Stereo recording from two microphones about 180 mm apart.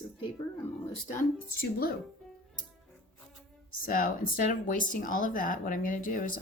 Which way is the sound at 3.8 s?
50° left (ahead or behind).